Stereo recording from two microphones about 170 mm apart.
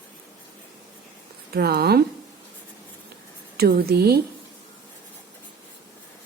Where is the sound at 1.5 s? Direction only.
65° right (ahead or behind).